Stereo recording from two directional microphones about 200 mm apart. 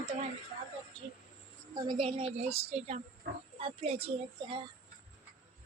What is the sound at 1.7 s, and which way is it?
A woman's voice, 25° right (ahead or behind).